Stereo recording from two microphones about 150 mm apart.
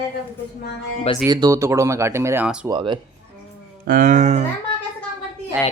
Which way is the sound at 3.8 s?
60° right (ahead or behind).